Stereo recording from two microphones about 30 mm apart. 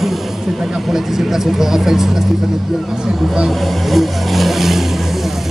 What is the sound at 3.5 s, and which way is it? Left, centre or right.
Vehicle, centre.